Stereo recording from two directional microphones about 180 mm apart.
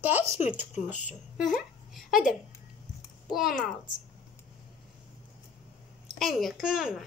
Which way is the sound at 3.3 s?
Centre (ahead or behind).